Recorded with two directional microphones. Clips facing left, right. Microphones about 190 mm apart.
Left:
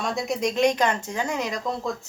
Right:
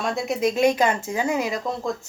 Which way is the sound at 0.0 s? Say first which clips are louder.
Right 3 dB; centre (ahead or behind).